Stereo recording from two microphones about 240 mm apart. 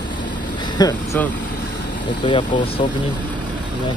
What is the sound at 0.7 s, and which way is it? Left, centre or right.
Speech, centre.